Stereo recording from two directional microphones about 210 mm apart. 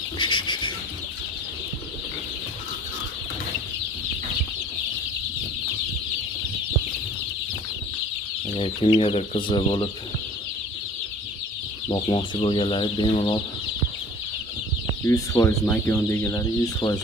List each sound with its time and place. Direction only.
0.2 s bird: 20° left (ahead or behind)
8.5 s speech: 25° left (ahead or behind)
11.9 s speech: 25° left (ahead or behind)
15.0 s speech: 15° left (ahead or behind)